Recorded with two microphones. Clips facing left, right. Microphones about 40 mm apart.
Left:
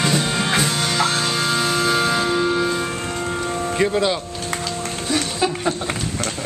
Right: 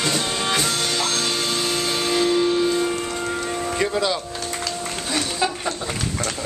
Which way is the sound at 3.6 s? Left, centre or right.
Centre.